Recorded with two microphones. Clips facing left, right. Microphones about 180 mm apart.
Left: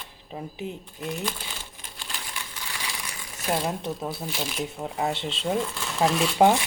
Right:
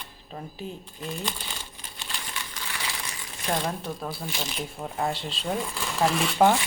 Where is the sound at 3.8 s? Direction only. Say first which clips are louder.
Left 3 dB; 20° left (ahead or behind).